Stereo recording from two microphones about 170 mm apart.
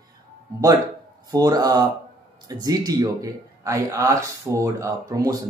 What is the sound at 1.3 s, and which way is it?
Speech, 20° right (ahead or behind).